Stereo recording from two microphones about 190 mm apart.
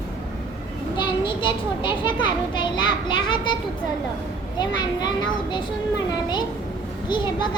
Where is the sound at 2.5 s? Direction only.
25° left (ahead or behind).